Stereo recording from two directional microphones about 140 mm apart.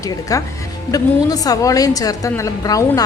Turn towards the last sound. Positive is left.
turn(degrees=25)  # may be behind; listen again after turning